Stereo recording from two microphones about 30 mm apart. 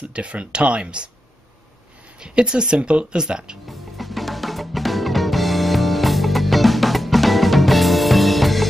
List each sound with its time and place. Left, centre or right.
0.1 s speech: right
2.1 s speech: right
3.6 s music: centre